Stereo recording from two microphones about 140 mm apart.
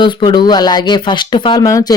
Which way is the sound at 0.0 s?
35° left (ahead or behind).